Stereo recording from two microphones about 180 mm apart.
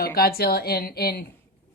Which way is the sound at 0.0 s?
55° left (ahead or behind).